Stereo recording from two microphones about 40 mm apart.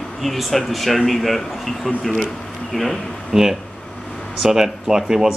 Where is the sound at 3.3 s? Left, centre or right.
Centre.